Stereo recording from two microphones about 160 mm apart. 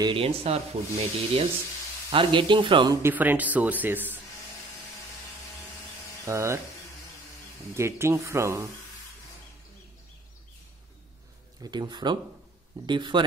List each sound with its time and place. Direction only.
0.0 s speech: 35° right (ahead or behind)
3.0 s speech: 10° right (ahead or behind)
6.2 s speech: 20° right (ahead or behind)
7.7 s speech: 15° right (ahead or behind)
11.6 s speech: 25° right (ahead or behind)